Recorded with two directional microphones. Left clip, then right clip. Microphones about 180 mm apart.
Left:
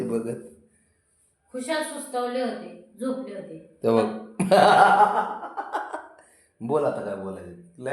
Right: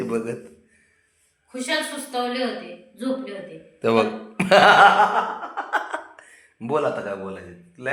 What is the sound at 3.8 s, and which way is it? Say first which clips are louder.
A man's voice: right 2 dB; 10° left (ahead or behind).